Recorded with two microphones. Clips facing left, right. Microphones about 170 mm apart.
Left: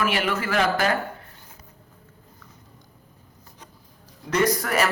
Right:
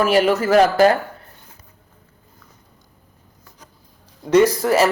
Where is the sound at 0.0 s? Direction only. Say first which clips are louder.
Right 9 dB; 40° right (ahead or behind).